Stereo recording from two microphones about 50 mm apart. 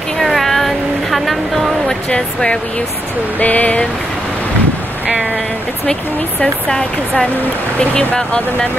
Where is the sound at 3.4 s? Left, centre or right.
Left.